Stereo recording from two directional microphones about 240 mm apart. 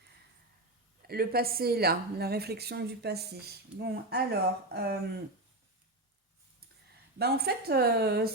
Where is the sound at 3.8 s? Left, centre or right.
Right.